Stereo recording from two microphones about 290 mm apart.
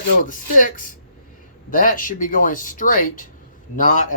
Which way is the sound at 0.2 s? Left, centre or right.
Left.